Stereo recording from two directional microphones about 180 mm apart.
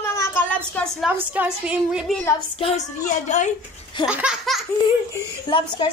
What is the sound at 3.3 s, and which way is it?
Speech, 40° left (ahead or behind).